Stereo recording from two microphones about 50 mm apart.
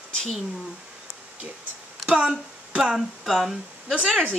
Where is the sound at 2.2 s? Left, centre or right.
Centre.